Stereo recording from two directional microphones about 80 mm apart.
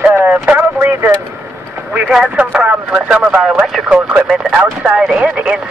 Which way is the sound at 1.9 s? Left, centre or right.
Centre.